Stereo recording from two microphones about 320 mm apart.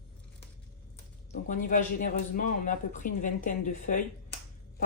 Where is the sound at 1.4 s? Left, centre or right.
Left.